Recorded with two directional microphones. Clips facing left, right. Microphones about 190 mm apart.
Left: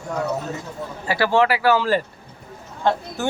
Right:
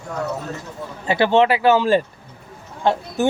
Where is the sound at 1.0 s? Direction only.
20° right (ahead or behind).